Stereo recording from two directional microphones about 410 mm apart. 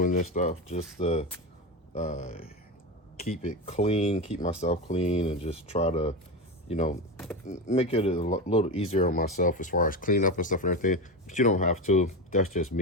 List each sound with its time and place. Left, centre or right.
0.0 s speech: centre